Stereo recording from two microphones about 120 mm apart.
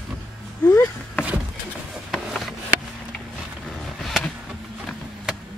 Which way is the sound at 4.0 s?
Centre (ahead or behind).